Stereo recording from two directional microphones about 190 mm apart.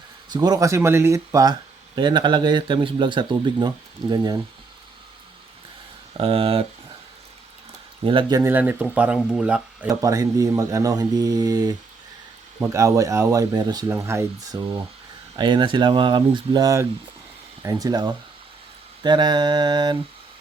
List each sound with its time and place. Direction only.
0.3 s speech: 20° right (ahead or behind)
6.1 s speech: 30° right (ahead or behind)
8.0 s speech: 25° right (ahead or behind)
8.4 s speech: 10° right (ahead or behind)
9.9 s speech: 15° right (ahead or behind)